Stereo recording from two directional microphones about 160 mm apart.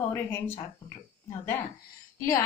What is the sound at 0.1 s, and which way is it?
Speech, 15° left (ahead or behind).